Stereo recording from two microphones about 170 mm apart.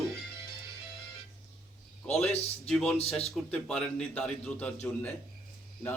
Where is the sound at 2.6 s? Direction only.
Centre (ahead or behind).